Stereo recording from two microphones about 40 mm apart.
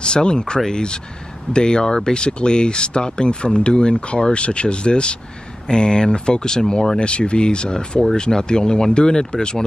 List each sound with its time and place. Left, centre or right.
0.0 s speech: left
7.0 s speech: left